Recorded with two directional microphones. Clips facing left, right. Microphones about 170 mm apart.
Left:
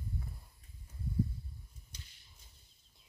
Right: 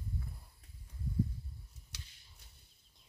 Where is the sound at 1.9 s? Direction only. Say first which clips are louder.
Right 1 dB; 75° right (ahead or behind).